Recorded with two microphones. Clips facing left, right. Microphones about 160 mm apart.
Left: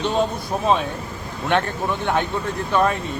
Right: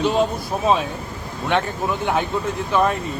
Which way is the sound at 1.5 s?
Centre (ahead or behind).